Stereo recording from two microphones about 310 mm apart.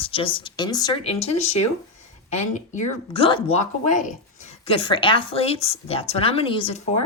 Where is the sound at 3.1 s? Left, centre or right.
Centre.